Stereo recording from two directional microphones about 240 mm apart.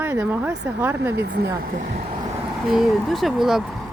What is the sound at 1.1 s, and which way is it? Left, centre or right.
Speech, right.